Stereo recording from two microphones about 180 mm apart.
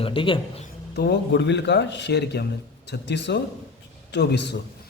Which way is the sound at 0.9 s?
65° left (ahead or behind).